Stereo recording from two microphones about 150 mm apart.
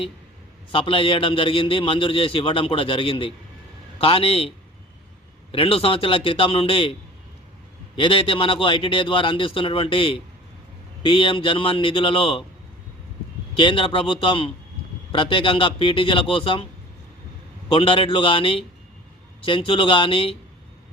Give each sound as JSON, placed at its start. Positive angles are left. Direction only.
{"t": 0.7, "sound": "a man's voice", "side_deg": 35}
{"t": 7.9, "sound": "a man's voice", "side_deg": 35}
{"t": 13.6, "sound": "a man's voice", "side_deg": 35}
{"t": 17.7, "sound": "a man's voice", "side_deg": 35}